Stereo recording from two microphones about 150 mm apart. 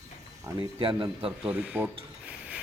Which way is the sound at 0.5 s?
35° right (ahead or behind).